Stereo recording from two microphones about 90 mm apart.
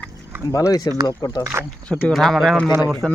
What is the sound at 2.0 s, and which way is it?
Speech, 5° left (ahead or behind).